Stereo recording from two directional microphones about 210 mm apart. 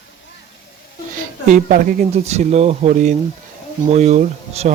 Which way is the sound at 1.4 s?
40° right (ahead or behind).